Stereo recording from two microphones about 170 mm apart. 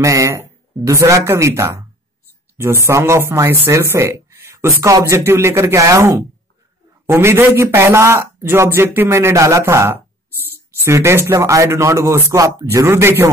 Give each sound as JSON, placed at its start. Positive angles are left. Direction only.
{"t": 0.0, "sound": "speech", "side_deg": -20}